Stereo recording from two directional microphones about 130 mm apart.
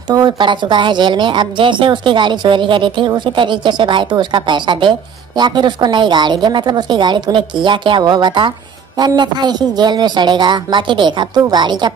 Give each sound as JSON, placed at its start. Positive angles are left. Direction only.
{"t": 0.1, "sound": "a woman's voice", "side_deg": -35}